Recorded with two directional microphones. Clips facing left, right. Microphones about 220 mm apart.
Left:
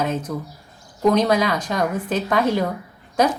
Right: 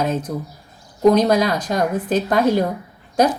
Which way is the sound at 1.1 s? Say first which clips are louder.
Even; 40° right (ahead or behind).